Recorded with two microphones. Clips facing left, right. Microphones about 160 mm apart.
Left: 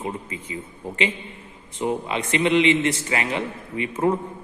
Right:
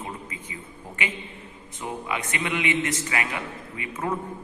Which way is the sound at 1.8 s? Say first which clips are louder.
Left 6 dB; 30° left (ahead or behind).